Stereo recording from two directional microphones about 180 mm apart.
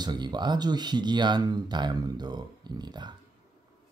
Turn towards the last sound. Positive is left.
turn(degrees=-25)  # may be behind; listen again after turning